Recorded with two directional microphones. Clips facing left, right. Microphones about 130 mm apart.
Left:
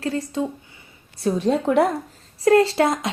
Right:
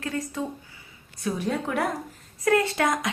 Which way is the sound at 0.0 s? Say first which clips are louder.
Left 6 dB; 30° left (ahead or behind).